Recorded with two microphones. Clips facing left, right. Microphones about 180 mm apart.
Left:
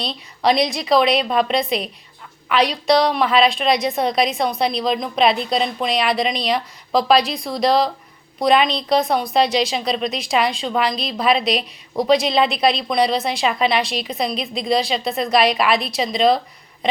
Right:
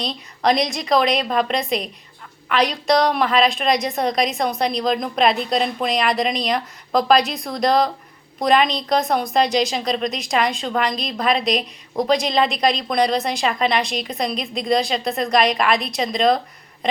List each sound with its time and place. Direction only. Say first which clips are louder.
0.0 s speech: left 1 dB; 5° left (ahead or behind)